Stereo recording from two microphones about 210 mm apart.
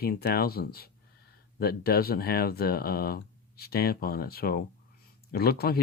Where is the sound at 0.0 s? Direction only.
45° left (ahead or behind).